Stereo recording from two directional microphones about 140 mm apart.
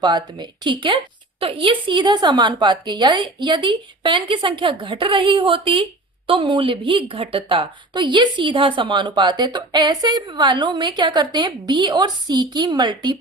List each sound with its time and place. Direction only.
0.0 s a woman's voice: 30° right (ahead or behind)